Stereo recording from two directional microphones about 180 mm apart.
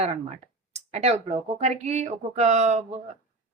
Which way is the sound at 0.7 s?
35° right (ahead or behind).